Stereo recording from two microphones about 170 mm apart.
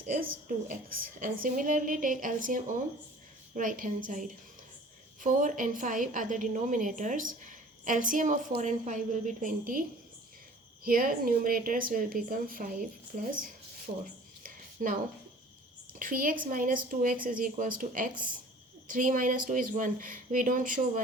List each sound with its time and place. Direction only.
0.2 s a woman's voice: 55° right (ahead or behind)
10.8 s a woman's voice: 55° right (ahead or behind)
14.4 s a sound: 50° right (ahead or behind)
15.9 s a woman's voice: 55° right (ahead or behind)